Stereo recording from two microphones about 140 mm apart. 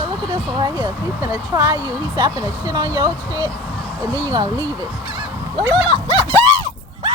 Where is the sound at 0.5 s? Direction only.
30° right (ahead or behind).